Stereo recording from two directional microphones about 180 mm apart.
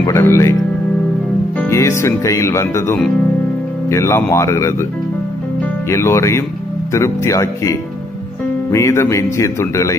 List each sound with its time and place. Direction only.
0.0 s speech: 15° left (ahead or behind)
1.7 s speech: 15° left (ahead or behind)
5.9 s speech: 15° left (ahead or behind)
8.7 s speech: 15° left (ahead or behind)